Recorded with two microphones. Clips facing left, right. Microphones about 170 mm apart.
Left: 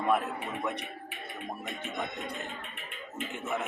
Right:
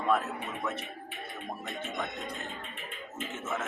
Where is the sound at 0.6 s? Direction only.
15° left (ahead or behind).